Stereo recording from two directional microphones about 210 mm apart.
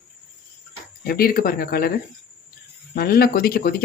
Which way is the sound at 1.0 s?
45° left (ahead or behind).